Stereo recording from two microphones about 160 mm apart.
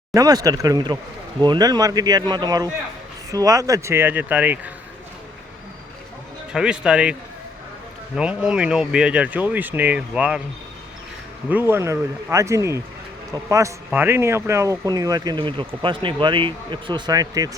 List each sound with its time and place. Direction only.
0.1 s speech: 20° right (ahead or behind)
6.5 s speech: 5° right (ahead or behind)
11.4 s speech: 15° right (ahead or behind)